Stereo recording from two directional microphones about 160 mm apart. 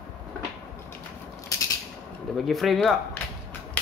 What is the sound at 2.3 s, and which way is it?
Speech, centre (ahead or behind).